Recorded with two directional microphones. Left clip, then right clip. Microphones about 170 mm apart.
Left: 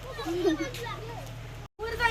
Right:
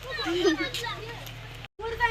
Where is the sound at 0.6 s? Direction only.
10° left (ahead or behind).